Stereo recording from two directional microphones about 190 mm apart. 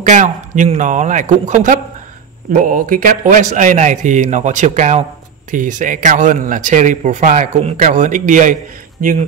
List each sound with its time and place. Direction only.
0.0 s speech: 40° right (ahead or behind)